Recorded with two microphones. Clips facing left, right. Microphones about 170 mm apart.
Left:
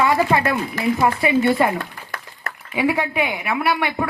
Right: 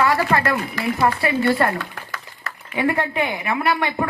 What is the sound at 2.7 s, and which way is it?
Speech, 5° left (ahead or behind).